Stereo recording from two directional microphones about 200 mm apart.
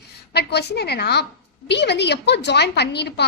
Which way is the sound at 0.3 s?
55° left (ahead or behind).